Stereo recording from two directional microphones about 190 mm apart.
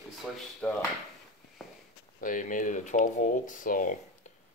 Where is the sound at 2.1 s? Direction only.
45° left (ahead or behind).